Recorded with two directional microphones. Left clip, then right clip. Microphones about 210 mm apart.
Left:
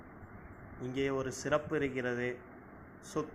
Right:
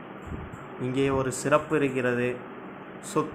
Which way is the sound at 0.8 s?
15° left (ahead or behind).